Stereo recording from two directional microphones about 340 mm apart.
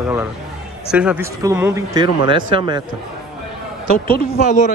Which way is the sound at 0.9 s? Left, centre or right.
Centre.